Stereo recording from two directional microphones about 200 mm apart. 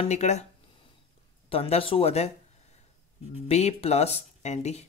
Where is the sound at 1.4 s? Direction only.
30° left (ahead or behind).